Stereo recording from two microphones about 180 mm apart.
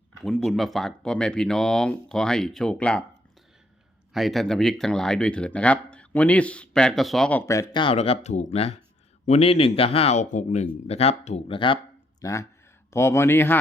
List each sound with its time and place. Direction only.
0.2 s speech: centre (ahead or behind)
4.1 s speech: centre (ahead or behind); by 11.8 s 30° left (ahead or behind)
12.2 s speech: 15° left (ahead or behind)